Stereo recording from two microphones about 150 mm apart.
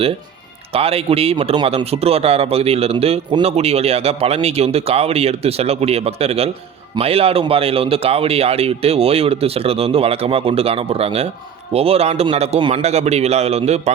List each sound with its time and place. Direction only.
0.7 s a man's voice: 40° right (ahead or behind)